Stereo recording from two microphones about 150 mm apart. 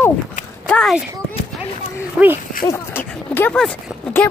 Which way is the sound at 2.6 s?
15° left (ahead or behind).